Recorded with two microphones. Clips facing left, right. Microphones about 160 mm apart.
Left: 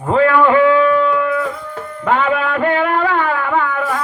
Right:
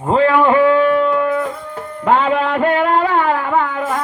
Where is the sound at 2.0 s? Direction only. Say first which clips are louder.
Right 2 dB; 30° right (ahead or behind).